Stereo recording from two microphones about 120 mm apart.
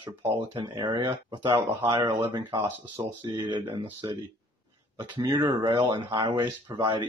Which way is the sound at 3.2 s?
40° right (ahead or behind).